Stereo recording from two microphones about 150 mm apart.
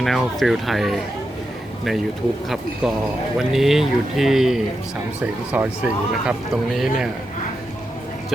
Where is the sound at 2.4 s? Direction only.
Centre (ahead or behind).